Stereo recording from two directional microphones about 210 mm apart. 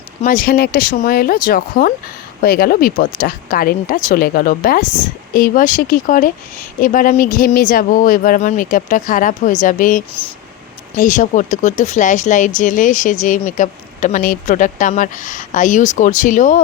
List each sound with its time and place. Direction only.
0.2 s speech: 40° left (ahead or behind)